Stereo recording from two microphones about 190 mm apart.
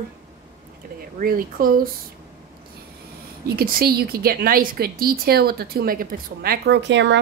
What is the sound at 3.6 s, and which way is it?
A woman's voice, 50° right (ahead or behind).